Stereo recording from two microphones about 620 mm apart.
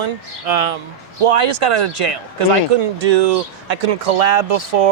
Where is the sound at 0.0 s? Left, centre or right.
Right.